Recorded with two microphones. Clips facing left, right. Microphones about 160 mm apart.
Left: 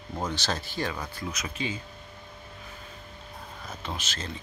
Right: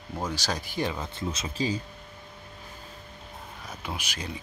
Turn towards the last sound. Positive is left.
turn(degrees=-15)  # may be behind; listen again after turning